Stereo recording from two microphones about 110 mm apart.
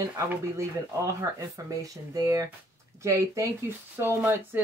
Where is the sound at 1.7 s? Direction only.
30° right (ahead or behind).